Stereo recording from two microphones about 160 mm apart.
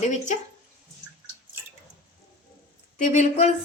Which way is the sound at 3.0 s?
45° left (ahead or behind).